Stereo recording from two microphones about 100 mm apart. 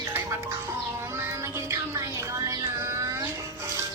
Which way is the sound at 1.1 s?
25° right (ahead or behind).